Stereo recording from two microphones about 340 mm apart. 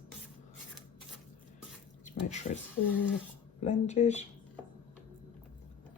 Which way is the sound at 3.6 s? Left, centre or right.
Centre.